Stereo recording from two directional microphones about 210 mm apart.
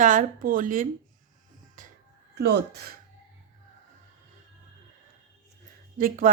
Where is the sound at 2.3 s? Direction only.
50° right (ahead or behind).